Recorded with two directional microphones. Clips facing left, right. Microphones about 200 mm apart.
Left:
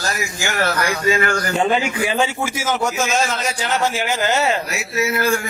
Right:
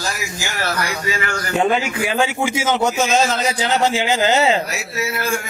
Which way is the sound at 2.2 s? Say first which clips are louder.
Right 3 dB; 20° right (ahead or behind).